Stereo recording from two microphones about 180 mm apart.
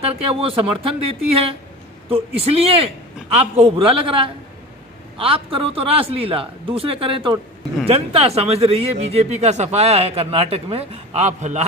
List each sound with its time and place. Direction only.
0.0 s speech: 30° right (ahead or behind)